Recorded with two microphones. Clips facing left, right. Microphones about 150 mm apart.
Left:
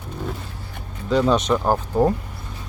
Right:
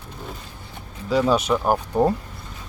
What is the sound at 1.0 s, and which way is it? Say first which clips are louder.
Speech: left 1 dB; 5° right (ahead or behind).